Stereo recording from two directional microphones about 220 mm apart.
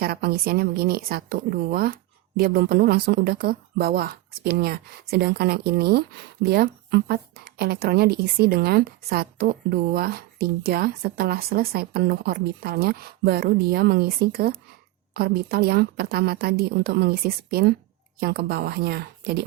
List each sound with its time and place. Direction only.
0.0 s a woman's voice: 45° right (ahead or behind)